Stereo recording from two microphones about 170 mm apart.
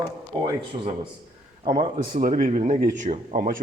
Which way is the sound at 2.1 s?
50° right (ahead or behind).